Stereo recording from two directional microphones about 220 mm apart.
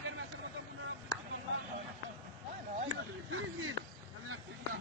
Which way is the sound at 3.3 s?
65° right (ahead or behind).